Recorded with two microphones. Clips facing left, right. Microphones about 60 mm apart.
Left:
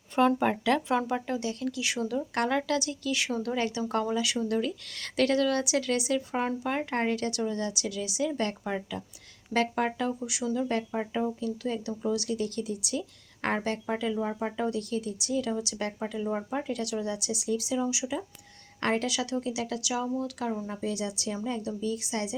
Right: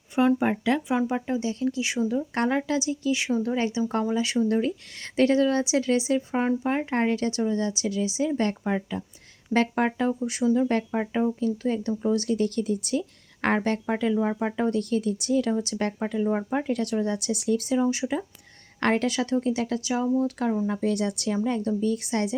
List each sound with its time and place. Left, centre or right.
0.2 s speech: centre; by 13.9 s right
13.9 s speech: right
14.5 s speech: right
16.5 s speech: right
20.7 s speech: right